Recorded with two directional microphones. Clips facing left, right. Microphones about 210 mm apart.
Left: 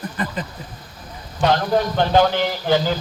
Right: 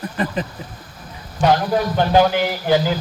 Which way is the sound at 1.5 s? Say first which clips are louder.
Left 2 dB; 10° right (ahead or behind).